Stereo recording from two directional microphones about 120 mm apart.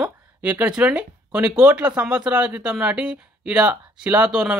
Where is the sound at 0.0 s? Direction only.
10° right (ahead or behind).